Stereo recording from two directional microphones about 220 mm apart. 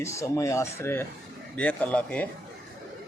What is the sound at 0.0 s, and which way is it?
A man's voice, 15° left (ahead or behind).